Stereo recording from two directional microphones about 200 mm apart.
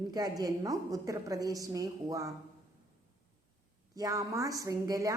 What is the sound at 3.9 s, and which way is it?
A woman's voice, 15° right (ahead or behind).